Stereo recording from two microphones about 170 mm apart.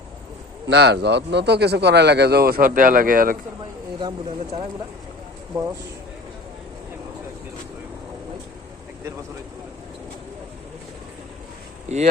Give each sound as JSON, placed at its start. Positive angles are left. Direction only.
{"t": 0.7, "sound": "speech", "side_deg": -80}
{"t": 4.0, "sound": "speech", "side_deg": -35}
{"t": 11.9, "sound": "speech", "side_deg": -40}